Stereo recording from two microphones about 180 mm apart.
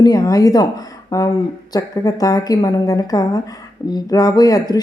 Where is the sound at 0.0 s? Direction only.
20° left (ahead or behind).